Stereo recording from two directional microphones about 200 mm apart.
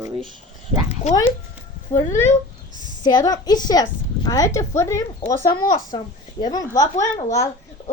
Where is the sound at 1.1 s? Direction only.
35° left (ahead or behind).